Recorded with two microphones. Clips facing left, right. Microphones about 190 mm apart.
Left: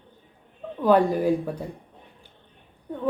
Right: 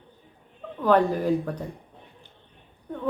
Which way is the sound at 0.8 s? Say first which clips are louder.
Left 2 dB; 10° left (ahead or behind).